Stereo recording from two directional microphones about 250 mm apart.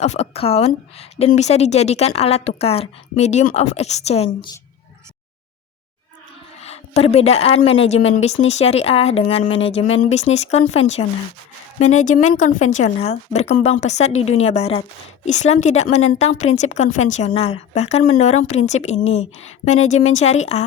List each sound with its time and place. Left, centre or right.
0.0 s a woman's voice: left
6.6 s a woman's voice: left